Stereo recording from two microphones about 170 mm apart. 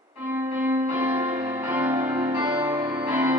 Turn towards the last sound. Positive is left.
turn(degrees=-10)  # may be behind; listen again after turning